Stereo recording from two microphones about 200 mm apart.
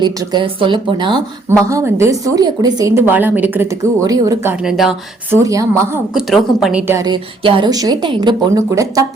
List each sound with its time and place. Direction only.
0.0 s a woman's voice: 20° right (ahead or behind); by 4.9 s centre (ahead or behind)
5.3 s a woman's voice: 15° right (ahead or behind)
6.1 s a woman's voice: centre (ahead or behind)
7.1 s a woman's voice: 25° right (ahead or behind)